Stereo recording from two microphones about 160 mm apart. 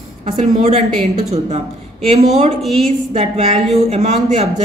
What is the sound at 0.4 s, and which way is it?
Speech, 45° right (ahead or behind).